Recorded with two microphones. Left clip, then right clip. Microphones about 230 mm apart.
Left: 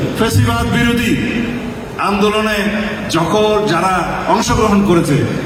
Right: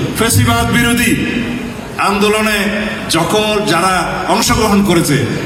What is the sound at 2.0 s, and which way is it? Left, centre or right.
A man's voice, right.